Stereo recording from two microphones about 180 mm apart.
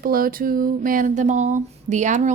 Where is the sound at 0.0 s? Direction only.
55° right (ahead or behind).